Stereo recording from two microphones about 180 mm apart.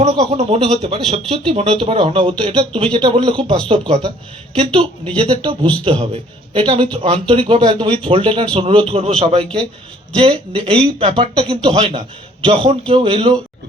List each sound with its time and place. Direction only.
0.0 s speech: 35° right (ahead or behind)